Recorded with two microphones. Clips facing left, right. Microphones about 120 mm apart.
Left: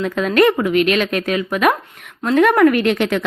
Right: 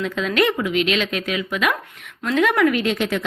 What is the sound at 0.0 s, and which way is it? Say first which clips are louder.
A woman's voice: left 6 dB; 45° left (ahead or behind).